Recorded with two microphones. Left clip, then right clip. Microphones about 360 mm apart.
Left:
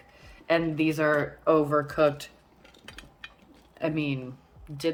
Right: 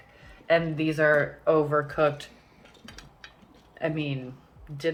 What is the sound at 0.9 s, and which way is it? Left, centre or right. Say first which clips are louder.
A woman's voice: right 5 dB; left.